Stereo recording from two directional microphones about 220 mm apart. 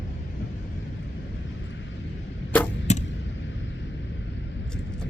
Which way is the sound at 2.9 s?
30° left (ahead or behind).